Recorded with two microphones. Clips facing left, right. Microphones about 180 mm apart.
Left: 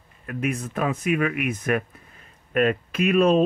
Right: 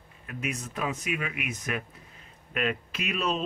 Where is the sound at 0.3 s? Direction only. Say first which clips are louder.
Left 8 dB; 55° left (ahead or behind).